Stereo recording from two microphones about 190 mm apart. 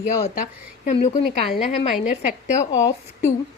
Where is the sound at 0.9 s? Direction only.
40° left (ahead or behind).